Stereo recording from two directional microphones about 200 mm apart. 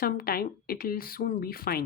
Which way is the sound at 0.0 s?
50° left (ahead or behind).